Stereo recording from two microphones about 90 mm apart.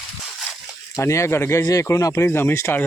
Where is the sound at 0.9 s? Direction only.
35° left (ahead or behind).